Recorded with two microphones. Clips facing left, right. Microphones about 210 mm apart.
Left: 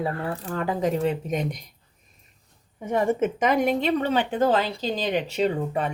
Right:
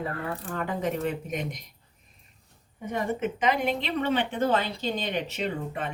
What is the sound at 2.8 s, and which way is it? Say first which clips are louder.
A woman's voice: left 6 dB; 45° left (ahead or behind).